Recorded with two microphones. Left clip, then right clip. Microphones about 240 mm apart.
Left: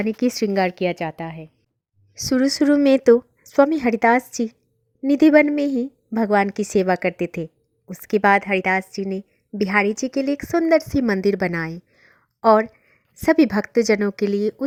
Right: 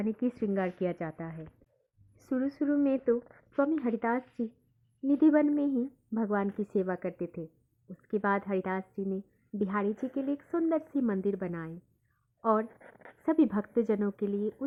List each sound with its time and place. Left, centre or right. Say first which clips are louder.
0.0 s a woman's voice: left 11 dB; left
2.6 s a woman's voice: left 13 dB; left
13.2 s a woman's voice: left 11 dB; left